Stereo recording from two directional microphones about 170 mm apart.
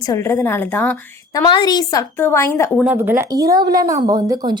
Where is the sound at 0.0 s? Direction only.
20° left (ahead or behind).